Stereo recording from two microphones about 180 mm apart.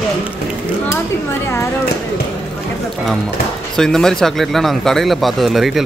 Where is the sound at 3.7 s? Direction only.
5° left (ahead or behind).